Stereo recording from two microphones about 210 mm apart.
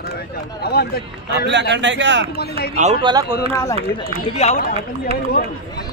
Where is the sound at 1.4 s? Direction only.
55° right (ahead or behind).